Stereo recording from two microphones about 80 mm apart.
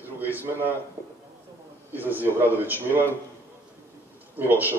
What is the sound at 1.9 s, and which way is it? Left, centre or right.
Speech, right.